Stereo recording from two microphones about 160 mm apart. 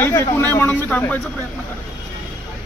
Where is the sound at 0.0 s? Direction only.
15° left (ahead or behind).